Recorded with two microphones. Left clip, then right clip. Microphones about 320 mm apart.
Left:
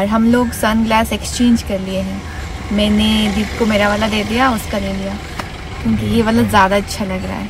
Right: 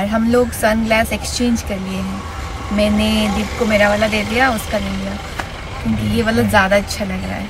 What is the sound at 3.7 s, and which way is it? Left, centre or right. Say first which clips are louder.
Speech: right 2 dB; centre.